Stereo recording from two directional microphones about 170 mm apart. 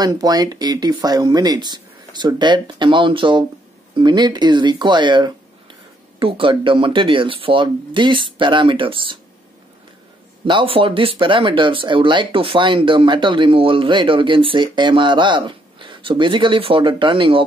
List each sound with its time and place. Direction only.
0.0 s speech: 25° right (ahead or behind)
10.4 s speech: 30° right (ahead or behind)